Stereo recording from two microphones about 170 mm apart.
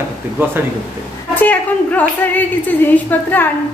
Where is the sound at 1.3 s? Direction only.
10° left (ahead or behind).